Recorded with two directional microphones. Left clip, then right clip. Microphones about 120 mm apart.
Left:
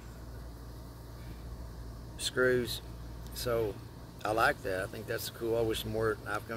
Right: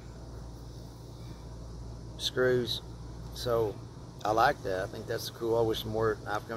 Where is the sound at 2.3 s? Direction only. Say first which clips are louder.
Right 1 dB; 10° left (ahead or behind).